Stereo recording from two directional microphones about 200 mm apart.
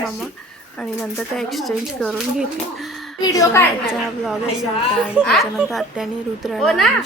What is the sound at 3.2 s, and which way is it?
Speech, 15° left (ahead or behind).